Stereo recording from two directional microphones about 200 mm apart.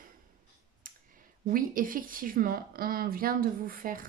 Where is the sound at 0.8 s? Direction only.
45° right (ahead or behind).